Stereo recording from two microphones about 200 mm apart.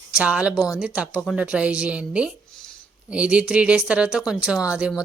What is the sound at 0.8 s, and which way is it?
A man's voice, 5° right (ahead or behind).